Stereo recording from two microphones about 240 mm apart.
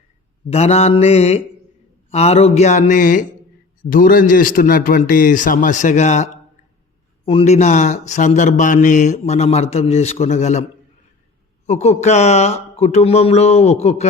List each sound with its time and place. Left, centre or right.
0.5 s a man's voice: left